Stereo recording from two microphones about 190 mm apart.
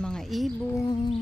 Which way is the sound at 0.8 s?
25° left (ahead or behind).